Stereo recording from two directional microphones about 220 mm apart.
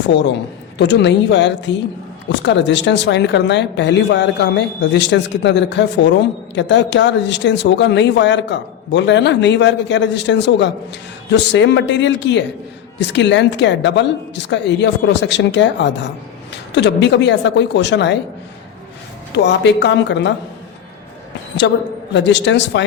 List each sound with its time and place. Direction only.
0.8 s speech: 50° left (ahead or behind)
19.4 s speech: 50° left (ahead or behind)
21.6 s a woman's voice: 55° left (ahead or behind)